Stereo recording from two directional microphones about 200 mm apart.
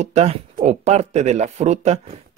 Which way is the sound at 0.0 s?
35° right (ahead or behind).